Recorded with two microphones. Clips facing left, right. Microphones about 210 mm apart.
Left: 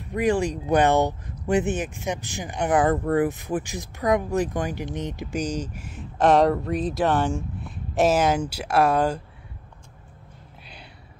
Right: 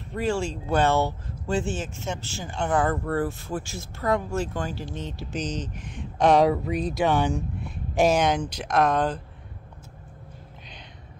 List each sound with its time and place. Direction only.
0.1 s speech: 15° left (ahead or behind)